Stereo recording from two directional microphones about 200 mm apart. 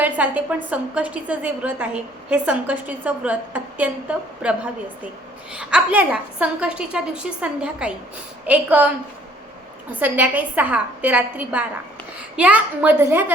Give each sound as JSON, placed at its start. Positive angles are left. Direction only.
{"t": 0.0, "sound": "a woman's voice", "side_deg": -5}
{"t": 10.0, "sound": "a woman's voice", "side_deg": -10}